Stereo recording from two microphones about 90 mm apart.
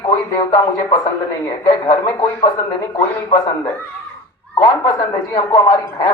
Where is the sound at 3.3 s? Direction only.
45° left (ahead or behind).